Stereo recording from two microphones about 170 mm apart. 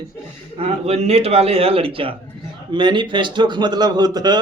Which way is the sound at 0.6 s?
40° right (ahead or behind).